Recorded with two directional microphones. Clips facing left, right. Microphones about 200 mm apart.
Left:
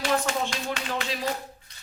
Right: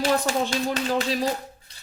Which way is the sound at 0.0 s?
35° right (ahead or behind).